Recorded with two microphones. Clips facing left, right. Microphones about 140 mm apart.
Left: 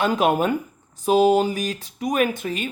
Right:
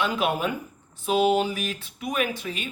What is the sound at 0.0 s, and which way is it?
Speech, 45° left (ahead or behind).